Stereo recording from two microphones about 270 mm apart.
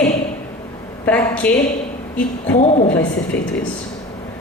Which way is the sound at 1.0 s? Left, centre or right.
Centre.